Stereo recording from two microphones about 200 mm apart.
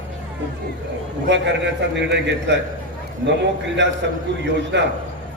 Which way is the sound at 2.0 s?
60° right (ahead or behind).